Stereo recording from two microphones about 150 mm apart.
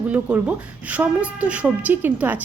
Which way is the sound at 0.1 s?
10° right (ahead or behind).